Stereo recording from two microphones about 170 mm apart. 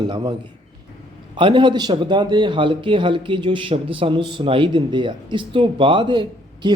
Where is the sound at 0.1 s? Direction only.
25° right (ahead or behind).